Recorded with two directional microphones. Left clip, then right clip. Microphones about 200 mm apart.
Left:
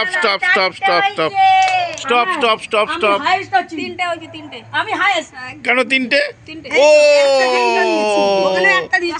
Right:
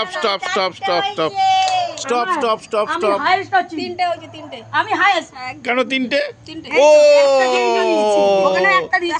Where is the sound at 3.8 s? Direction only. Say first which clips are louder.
Right 1 dB; 65° right (ahead or behind).